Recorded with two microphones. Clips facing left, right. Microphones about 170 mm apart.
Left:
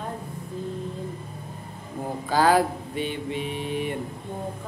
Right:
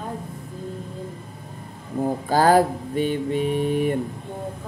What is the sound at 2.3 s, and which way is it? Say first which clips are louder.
Mantra: right 3 dB; 45° right (ahead or behind).